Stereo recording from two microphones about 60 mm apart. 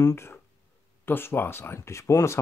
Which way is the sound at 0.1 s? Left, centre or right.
Left.